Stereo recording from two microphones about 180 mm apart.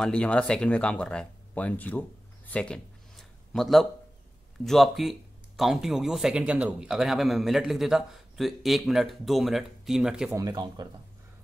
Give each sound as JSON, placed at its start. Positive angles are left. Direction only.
{"t": 0.0, "sound": "speech", "side_deg": 5}
{"t": 10.3, "sound": "speech", "side_deg": -20}